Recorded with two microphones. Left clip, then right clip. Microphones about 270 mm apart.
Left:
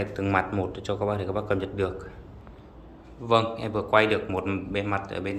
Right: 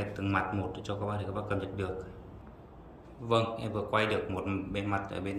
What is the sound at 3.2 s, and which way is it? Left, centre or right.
A man's voice, centre.